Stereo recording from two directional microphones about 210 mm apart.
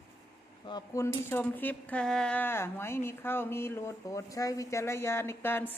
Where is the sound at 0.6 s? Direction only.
15° left (ahead or behind).